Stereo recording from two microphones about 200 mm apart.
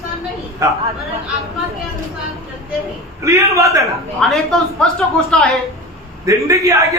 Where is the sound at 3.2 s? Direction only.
15° right (ahead or behind).